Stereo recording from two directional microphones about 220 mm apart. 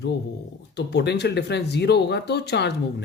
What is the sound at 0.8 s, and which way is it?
Speech, 50° left (ahead or behind).